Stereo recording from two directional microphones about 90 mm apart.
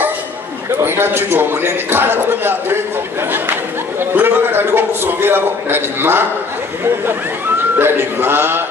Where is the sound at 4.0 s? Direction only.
25° right (ahead or behind).